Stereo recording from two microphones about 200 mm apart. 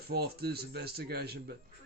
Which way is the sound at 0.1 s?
50° right (ahead or behind).